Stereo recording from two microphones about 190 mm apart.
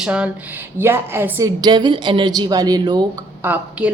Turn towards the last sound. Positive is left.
turn(degrees=-10)  # may be behind; listen again after turning